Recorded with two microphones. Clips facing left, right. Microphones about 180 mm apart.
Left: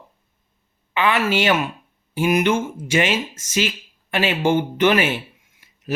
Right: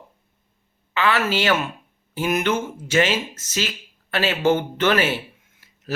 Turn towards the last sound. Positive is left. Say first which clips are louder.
# left 2 dB
turn(degrees=15)  # may be behind; listen again after turning